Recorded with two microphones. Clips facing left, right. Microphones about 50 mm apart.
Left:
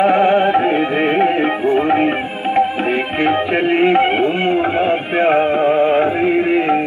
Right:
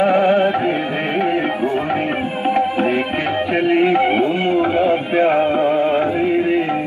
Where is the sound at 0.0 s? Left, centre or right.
Centre.